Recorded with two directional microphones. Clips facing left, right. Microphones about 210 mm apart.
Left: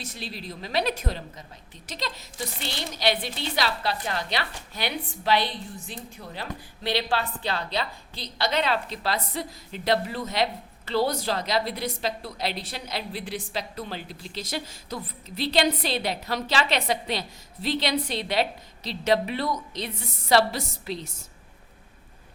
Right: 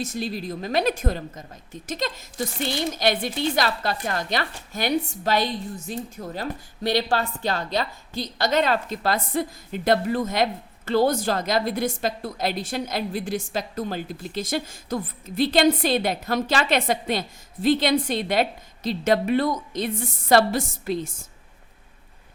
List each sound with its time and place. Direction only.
0.0 s a woman's voice: 45° right (ahead or behind)